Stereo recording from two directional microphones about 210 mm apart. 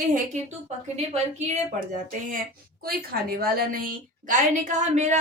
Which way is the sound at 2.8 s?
45° right (ahead or behind).